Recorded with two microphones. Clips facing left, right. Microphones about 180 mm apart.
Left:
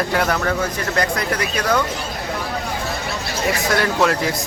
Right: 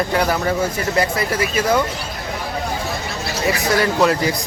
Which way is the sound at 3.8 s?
Centre (ahead or behind).